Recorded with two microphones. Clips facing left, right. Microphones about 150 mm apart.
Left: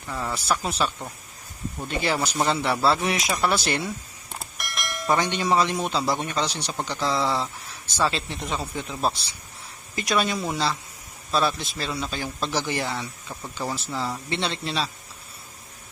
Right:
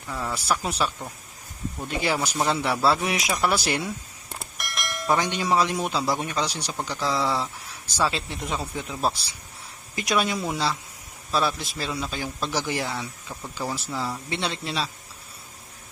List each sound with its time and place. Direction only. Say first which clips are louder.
0.1 s a man's voice: even; centre (ahead or behind)